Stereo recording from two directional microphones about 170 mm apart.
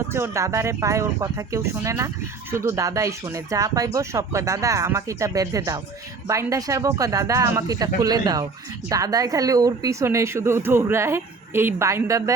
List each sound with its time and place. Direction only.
0.1 s a woman's voice: 15° right (ahead or behind)